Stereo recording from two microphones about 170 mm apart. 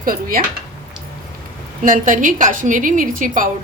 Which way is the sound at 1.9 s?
50° right (ahead or behind).